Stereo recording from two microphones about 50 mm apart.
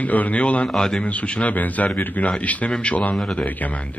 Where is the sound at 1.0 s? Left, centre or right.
Left.